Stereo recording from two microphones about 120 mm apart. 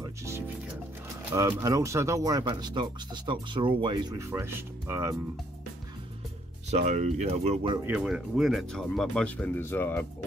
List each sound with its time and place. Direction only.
0.0 s music: 25° right (ahead or behind)
1.3 s speech: 25° right (ahead or behind)
4.2 s speech: 20° right (ahead or behind)
6.7 s speech: 75° right (ahead or behind)
7.8 s speech: 5° right (ahead or behind); by 10.0 s 15° left (ahead or behind)